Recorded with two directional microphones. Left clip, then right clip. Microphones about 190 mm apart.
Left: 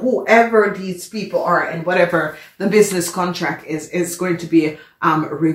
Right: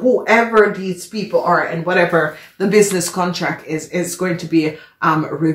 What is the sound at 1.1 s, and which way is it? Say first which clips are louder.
Speech: right 2 dB; 40° right (ahead or behind).